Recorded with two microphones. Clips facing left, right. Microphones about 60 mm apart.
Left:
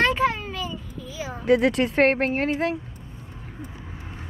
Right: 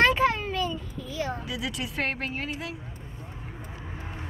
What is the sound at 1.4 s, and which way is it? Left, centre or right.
Speech, left.